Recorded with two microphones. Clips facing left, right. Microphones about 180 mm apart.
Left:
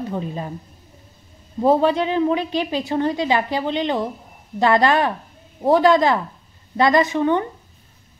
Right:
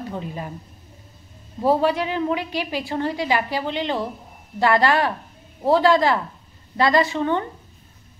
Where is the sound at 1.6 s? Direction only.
20° left (ahead or behind).